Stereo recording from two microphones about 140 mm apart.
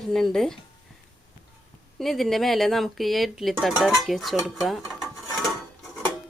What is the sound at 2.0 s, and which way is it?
Speech, centre (ahead or behind).